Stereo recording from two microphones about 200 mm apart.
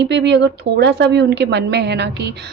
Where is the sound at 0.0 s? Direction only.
60° right (ahead or behind).